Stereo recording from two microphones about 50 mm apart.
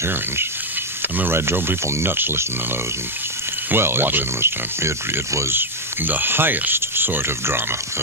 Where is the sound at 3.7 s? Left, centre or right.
Right.